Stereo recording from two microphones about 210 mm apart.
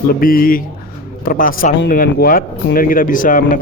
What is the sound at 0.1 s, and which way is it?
A man's voice, 45° left (ahead or behind).